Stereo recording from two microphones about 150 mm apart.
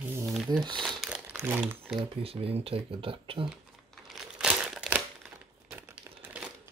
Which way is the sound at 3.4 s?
5° right (ahead or behind).